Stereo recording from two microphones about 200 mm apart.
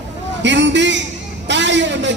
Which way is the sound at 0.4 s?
65° right (ahead or behind).